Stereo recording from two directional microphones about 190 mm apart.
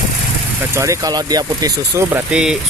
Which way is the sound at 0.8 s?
20° right (ahead or behind).